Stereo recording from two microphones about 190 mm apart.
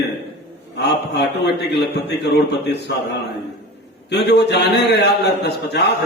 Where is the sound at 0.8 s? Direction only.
60° left (ahead or behind).